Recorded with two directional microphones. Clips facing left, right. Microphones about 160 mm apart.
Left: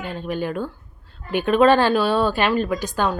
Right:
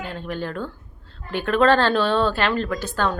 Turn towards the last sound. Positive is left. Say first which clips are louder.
# left 2 dB
turn(degrees=15)  # may be behind; listen again after turning